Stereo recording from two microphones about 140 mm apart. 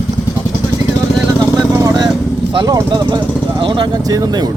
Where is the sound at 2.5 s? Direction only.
30° right (ahead or behind).